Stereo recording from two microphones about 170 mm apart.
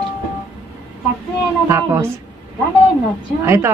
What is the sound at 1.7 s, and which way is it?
Speech, 15° right (ahead or behind).